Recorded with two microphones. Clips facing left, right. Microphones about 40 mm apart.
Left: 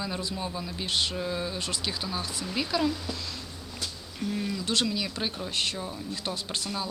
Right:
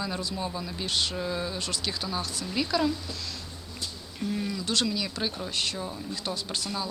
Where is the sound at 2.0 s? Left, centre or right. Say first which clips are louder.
Right 1 dB; centre.